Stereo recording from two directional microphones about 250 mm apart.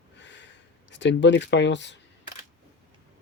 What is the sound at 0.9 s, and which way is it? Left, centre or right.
Speech, left.